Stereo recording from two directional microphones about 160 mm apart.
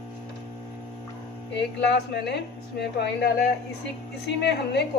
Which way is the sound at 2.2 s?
90° left.